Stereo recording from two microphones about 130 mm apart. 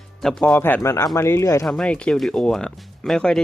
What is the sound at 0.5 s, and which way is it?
Speech, 15° left (ahead or behind).